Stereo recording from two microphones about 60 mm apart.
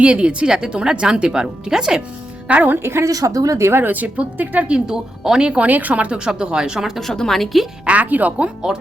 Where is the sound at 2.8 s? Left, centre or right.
Right.